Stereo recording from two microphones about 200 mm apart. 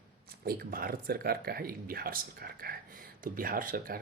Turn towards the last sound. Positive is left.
turn(degrees=-45)  # may be behind; listen again after turning